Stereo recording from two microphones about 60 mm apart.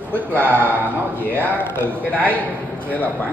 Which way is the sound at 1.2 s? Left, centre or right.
Left.